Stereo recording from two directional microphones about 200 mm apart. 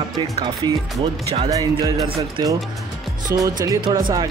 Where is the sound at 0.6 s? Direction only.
20° right (ahead or behind).